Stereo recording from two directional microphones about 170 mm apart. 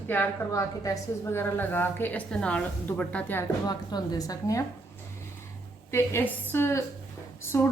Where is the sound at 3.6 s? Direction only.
25° left (ahead or behind).